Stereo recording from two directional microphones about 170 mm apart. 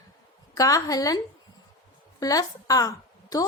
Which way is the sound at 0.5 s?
20° left (ahead or behind).